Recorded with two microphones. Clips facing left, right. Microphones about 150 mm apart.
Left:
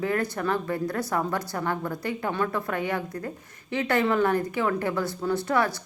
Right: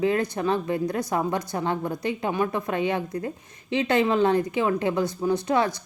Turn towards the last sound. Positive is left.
turn(degrees=-20)  # may be behind; listen again after turning